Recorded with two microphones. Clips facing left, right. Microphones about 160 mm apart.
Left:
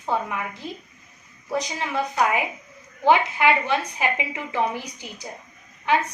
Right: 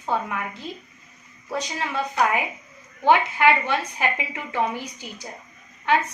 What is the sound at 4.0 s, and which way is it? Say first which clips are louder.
Speech: left 1 dB; 15° left (ahead or behind).